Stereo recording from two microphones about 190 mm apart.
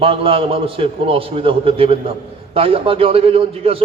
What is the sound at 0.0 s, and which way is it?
A man's voice, 30° right (ahead or behind).